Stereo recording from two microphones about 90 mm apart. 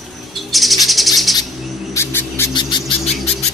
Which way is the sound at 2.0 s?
25° left (ahead or behind).